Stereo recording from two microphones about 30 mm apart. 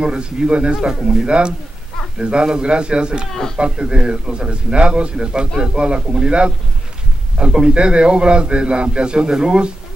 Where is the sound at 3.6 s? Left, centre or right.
Right.